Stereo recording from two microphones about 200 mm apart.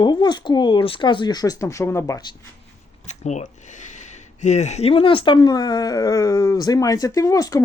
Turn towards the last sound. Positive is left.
turn(degrees=15)  # may be behind; listen again after turning